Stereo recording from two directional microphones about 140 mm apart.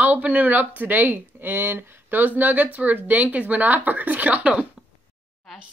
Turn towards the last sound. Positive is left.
turn(degrees=-10)  # may be behind; listen again after turning